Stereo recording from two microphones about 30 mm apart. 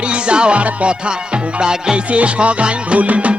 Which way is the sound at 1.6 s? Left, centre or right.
Right.